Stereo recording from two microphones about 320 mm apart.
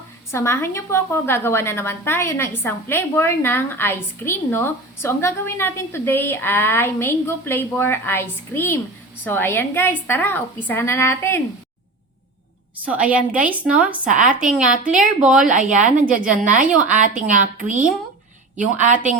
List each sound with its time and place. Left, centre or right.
0.3 s a woman's voice: centre
12.8 s a woman's voice: centre
14.0 s a woman's voice: right
14.9 s a woman's voice: centre
15.5 s a woman's voice: right
16.2 s a woman's voice: centre
16.9 s a woman's voice: right